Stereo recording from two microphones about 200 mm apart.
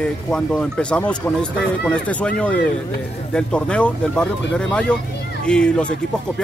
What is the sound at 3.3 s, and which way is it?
Speech, 5° left (ahead or behind).